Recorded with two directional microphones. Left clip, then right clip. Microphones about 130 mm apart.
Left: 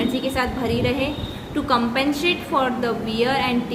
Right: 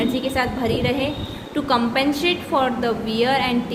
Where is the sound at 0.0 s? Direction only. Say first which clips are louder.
Right 1 dB; 25° right (ahead or behind).